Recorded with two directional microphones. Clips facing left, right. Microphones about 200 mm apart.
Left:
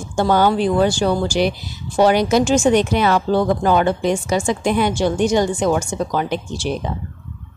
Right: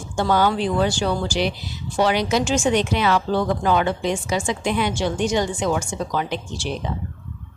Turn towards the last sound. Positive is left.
turn(degrees=45)  # may be behind; listen again after turning